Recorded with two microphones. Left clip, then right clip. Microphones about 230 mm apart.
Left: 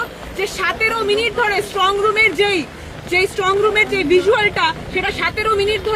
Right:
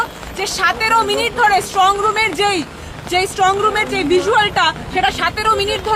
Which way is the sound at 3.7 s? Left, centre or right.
Centre.